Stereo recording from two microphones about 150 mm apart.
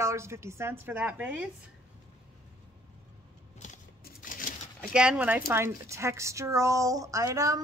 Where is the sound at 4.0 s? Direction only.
70° left (ahead or behind).